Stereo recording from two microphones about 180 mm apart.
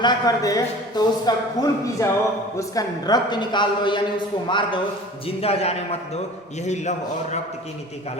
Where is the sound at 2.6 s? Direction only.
20° left (ahead or behind); by 6.9 s 40° left (ahead or behind).